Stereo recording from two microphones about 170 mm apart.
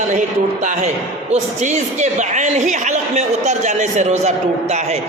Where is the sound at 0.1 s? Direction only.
45° right (ahead or behind).